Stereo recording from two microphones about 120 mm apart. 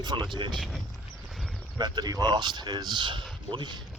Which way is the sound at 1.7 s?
35° right (ahead or behind).